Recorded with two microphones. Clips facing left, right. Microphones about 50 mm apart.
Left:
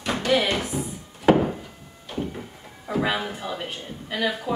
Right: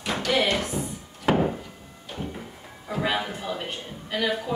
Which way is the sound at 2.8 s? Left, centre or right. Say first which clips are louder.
Left 2 dB; centre.